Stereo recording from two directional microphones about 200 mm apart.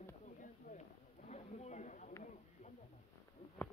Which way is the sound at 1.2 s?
35° left (ahead or behind).